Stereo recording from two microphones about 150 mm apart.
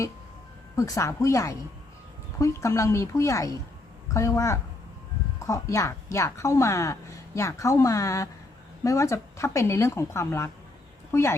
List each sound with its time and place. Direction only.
0.8 s a woman's voice: 20° left (ahead or behind)